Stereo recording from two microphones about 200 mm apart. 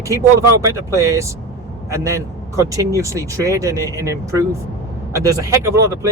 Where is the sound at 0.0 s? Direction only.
15° right (ahead or behind).